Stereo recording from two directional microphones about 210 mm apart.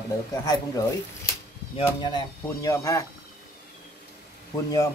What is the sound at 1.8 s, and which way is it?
Speech, 15° left (ahead or behind).